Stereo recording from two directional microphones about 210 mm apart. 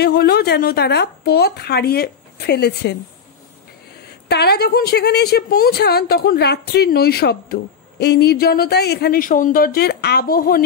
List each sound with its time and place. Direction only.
0.0 s a woman's voice: 50° left (ahead or behind)
4.3 s a woman's voice: 50° left (ahead or behind)